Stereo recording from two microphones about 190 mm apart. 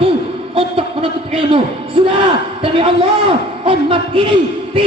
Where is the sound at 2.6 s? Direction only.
30° right (ahead or behind).